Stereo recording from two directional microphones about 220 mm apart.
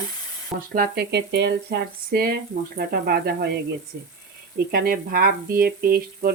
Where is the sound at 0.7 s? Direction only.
45° right (ahead or behind).